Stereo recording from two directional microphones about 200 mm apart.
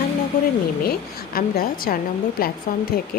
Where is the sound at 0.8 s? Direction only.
50° left (ahead or behind).